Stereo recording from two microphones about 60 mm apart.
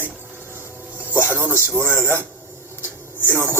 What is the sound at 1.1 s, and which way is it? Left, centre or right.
Music, right.